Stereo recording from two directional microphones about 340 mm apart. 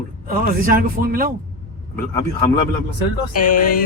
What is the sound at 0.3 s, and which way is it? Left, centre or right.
Speech, right.